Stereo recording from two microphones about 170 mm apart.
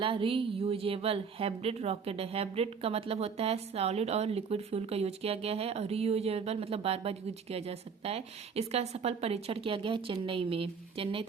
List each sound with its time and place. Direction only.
0.0 s a woman's voice: 30° right (ahead or behind)